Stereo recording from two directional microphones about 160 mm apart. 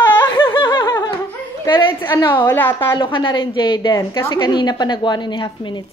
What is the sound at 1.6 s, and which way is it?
Speech, 30° left (ahead or behind).